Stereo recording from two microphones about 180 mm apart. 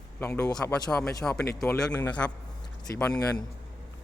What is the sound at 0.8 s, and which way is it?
Speech, 5° left (ahead or behind).